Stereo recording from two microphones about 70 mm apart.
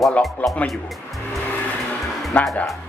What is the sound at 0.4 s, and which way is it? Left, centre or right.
Speech, left.